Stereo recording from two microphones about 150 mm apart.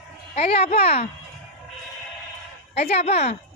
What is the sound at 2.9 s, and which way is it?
Speech, 45° left (ahead or behind).